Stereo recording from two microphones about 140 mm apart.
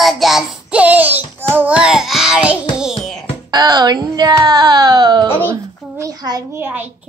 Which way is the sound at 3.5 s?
30° right (ahead or behind).